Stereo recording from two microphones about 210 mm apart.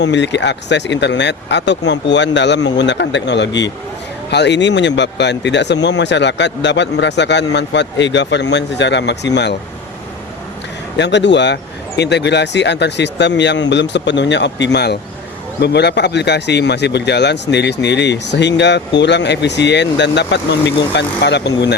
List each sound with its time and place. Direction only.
0.0 s speech: 55° left (ahead or behind)
10.9 s speech: 55° left (ahead or behind)